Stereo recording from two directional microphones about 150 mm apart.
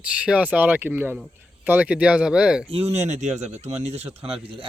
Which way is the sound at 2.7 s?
45° right (ahead or behind).